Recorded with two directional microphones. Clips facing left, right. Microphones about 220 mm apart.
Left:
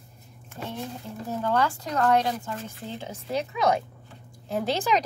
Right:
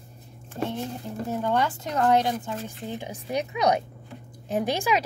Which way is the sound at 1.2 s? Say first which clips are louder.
Even; 15° right (ahead or behind).